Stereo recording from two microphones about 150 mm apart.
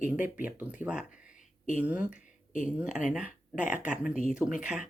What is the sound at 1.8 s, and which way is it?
Speech, 10° right (ahead or behind).